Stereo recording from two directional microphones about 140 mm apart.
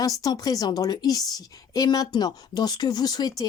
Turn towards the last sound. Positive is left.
turn(degrees=30)  # may be behind; listen again after turning